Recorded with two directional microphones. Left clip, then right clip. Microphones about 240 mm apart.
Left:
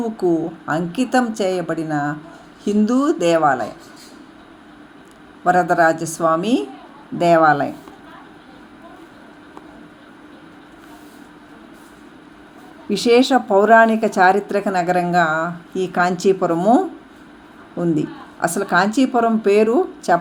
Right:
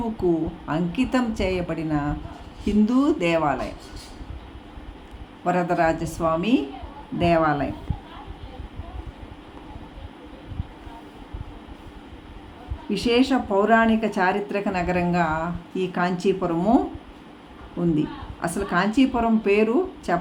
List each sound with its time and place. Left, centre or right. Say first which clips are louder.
0.2 s speech: left 4 dB; centre
5.5 s speech: left 7 dB; centre
12.9 s speech: left 7 dB; centre